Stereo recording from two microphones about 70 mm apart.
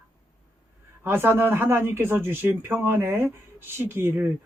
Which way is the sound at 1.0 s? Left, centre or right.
Right.